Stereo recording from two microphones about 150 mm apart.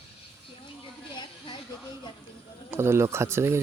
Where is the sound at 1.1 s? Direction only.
30° left (ahead or behind).